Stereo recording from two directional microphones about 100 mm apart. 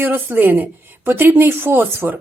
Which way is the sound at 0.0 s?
20° right (ahead or behind).